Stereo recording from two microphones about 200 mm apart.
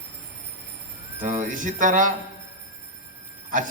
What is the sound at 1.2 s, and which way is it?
Speech, 40° right (ahead or behind).